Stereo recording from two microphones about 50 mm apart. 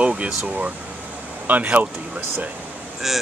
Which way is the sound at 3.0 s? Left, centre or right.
Centre.